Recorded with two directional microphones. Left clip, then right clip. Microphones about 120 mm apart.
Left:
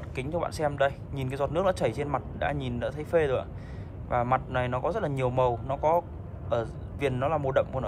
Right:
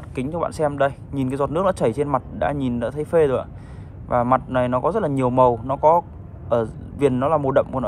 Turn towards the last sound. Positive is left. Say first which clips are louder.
# right 8 dB
turn(degrees=-10)  # may be behind; listen again after turning